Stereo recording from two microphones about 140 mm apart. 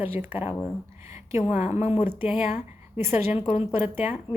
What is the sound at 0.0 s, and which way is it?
A woman's voice, 15° right (ahead or behind).